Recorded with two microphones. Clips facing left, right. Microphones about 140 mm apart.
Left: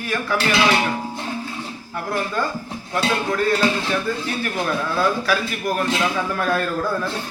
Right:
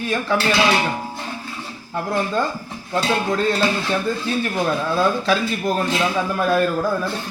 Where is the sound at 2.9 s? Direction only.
25° right (ahead or behind).